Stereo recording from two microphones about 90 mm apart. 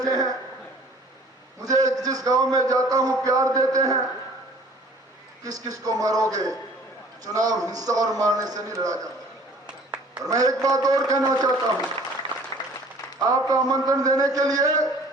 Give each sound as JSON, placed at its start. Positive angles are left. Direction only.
{"t": 0.0, "sound": "a sound", "side_deg": -45}
{"t": 1.6, "sound": "a man's voice", "side_deg": -45}
{"t": 5.4, "sound": "a man's voice", "side_deg": -45}
{"t": 10.2, "sound": "a man's voice", "side_deg": -45}
{"t": 13.1, "sound": "a man's voice", "side_deg": -40}